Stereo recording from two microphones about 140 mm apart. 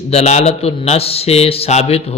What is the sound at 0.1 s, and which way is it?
A man's voice, 50° left (ahead or behind).